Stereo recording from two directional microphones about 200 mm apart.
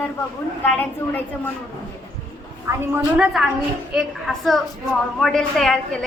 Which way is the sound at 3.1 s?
5° right (ahead or behind).